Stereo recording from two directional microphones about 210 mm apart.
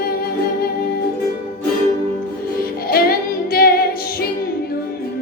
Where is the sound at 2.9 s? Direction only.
45° left (ahead or behind).